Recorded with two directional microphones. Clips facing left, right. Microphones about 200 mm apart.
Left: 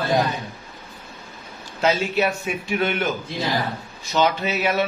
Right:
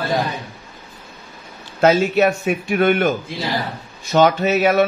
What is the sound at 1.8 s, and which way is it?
Speech, 50° right (ahead or behind).